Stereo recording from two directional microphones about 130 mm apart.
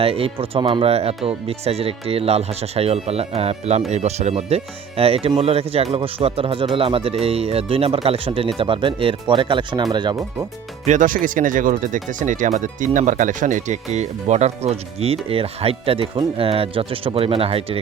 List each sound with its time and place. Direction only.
0.0 s speech: 45° right (ahead or behind)
10.8 s speech: 80° right; by 17.7 s 50° right (ahead or behind)